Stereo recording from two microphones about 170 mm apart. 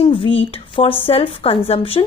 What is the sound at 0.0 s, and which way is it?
A woman's voice, 30° left (ahead or behind).